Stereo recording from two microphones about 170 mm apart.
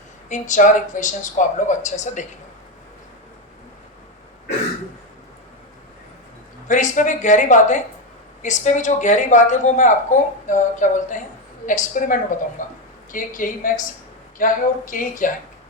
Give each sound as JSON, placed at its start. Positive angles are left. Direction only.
{"t": 0.3, "sound": "speech", "side_deg": 45}
{"t": 6.7, "sound": "speech", "side_deg": 45}